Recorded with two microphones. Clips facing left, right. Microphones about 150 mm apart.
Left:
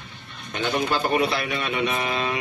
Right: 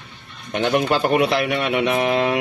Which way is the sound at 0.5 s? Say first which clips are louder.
Right 5 dB; 70° right (ahead or behind).